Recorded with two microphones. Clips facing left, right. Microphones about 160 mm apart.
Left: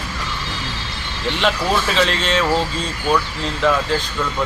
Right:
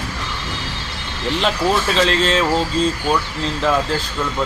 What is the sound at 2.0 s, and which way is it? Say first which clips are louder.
Speech: right 2 dB; 35° right (ahead or behind).